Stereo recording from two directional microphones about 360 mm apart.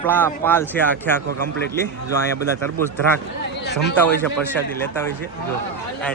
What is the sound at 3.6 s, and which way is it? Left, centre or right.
Speech, left.